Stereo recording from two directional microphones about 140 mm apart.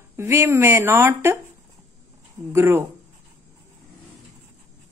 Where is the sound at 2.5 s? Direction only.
20° right (ahead or behind).